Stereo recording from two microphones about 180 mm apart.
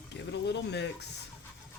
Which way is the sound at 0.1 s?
75° left (ahead or behind).